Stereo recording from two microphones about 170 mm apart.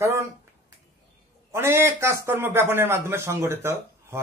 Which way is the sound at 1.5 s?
15° right (ahead or behind).